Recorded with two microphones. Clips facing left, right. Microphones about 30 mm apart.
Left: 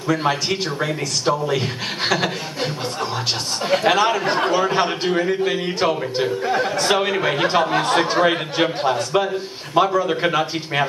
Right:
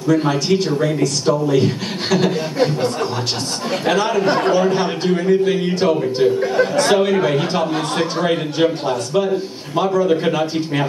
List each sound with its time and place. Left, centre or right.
0.1 s a man's voice: centre
3.7 s a man's voice: centre